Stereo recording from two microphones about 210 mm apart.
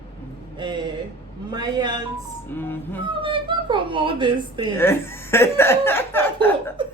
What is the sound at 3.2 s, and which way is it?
Speech, 25° right (ahead or behind).